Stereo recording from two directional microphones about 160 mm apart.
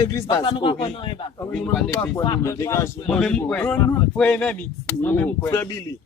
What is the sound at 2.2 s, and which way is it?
Speech, 25° left (ahead or behind).